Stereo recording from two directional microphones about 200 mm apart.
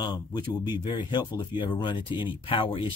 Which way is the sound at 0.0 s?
20° left (ahead or behind).